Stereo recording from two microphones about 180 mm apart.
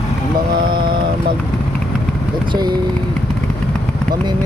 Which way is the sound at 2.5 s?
25° right (ahead or behind).